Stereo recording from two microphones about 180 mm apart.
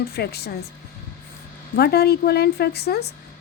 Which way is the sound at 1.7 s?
60° left (ahead or behind).